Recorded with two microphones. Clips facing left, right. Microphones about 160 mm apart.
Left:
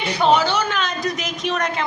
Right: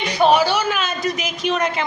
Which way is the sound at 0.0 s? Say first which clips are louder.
Right 2 dB; 15° right (ahead or behind).